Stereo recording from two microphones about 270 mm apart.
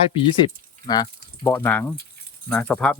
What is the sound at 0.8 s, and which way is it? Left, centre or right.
Speech, centre.